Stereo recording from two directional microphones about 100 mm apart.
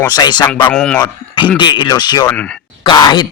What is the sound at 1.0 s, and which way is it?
Speech, 50° left (ahead or behind).